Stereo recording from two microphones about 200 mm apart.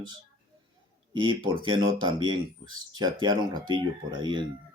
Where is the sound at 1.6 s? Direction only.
25° right (ahead or behind).